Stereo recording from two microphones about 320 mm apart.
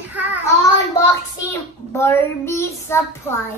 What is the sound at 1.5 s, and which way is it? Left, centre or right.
A child's voice, centre.